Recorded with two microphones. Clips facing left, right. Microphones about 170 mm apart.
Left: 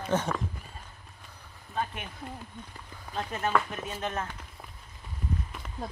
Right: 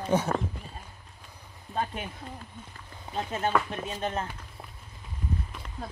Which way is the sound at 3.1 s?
25° right (ahead or behind).